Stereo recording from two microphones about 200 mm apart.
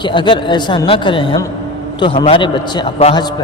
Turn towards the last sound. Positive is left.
turn(degrees=25)  # may be behind; listen again after turning